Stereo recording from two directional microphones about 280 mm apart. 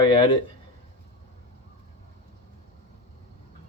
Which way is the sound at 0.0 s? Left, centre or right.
Centre.